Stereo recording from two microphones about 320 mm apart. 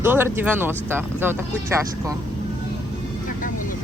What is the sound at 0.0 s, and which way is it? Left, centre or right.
Speech, centre.